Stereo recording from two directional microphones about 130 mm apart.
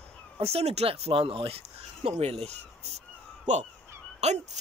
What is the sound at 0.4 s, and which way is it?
Speech, 50° right (ahead or behind).